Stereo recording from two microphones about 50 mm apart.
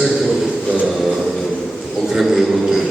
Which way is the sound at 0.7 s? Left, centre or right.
Right.